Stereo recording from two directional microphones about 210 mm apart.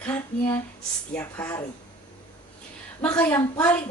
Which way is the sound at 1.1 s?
10° left (ahead or behind).